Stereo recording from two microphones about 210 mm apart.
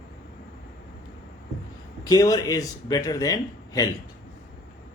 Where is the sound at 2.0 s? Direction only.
15° left (ahead or behind).